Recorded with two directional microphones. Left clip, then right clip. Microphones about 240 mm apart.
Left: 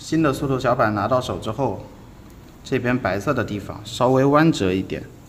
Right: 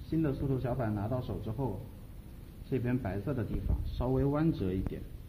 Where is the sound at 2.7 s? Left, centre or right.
Centre.